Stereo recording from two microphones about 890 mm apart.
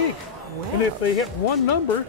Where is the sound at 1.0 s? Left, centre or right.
Left.